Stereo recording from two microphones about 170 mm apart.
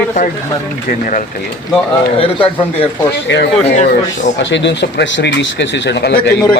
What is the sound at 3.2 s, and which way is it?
Speech, 85° left.